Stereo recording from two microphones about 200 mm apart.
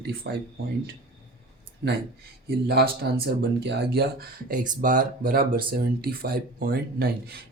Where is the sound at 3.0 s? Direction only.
55° right (ahead or behind).